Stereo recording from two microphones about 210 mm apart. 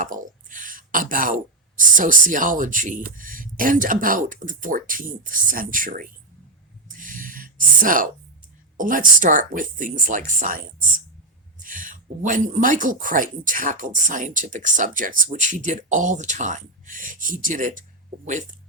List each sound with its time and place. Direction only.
0.0 s speech: 40° right (ahead or behind)
6.8 s a sound: 40° right (ahead or behind)
8.8 s speech: 40° right (ahead or behind)